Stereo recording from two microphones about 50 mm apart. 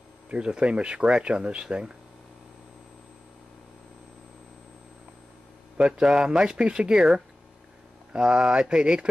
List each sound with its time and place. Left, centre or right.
0.3 s speech: right
5.8 s speech: centre